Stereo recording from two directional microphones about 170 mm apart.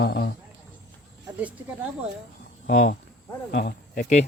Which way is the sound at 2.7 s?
55° left (ahead or behind).